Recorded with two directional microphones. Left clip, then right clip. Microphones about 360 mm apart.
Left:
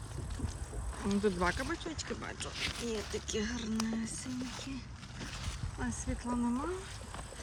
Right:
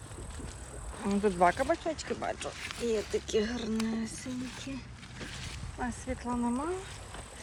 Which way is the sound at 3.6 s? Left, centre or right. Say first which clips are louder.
Right 3 dB; centre.